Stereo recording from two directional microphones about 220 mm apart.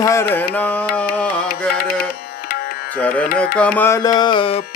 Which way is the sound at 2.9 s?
5° left (ahead or behind).